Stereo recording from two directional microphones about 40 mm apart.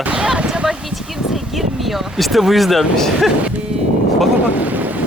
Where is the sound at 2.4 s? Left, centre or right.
Centre.